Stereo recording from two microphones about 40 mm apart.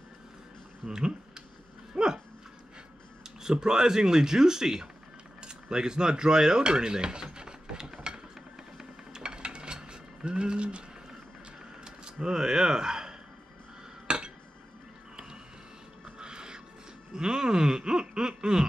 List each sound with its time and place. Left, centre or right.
0.8 s speech: centre
2.0 s dog: right
3.3 s speech: centre
5.4 s dishes: centre
8.7 s music: centre
11.8 s a sound: centre
16.2 s music: right
17.1 s speech: centre